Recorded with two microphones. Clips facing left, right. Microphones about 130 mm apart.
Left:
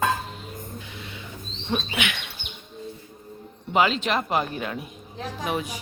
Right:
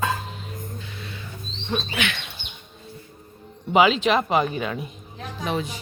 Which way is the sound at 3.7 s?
5° right (ahead or behind).